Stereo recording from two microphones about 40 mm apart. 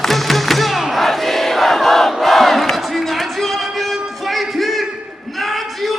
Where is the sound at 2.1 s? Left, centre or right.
Centre.